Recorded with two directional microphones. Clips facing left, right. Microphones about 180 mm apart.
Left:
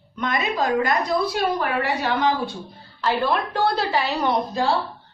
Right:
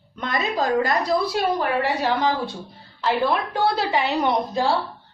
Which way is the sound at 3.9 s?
15° right (ahead or behind).